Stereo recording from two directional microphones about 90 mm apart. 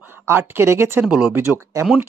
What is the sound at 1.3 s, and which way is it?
Speech, 25° right (ahead or behind).